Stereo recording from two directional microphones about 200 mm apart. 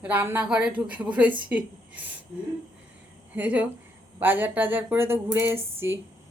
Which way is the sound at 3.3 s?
5° right (ahead or behind).